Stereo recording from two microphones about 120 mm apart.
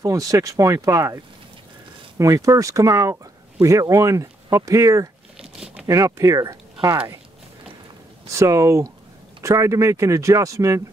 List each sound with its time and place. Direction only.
0.0 s speech: 30° right (ahead or behind)
5.4 s a sound: 5° right (ahead or behind)
5.9 s speech: 25° right (ahead or behind)
8.3 s speech: 25° right (ahead or behind)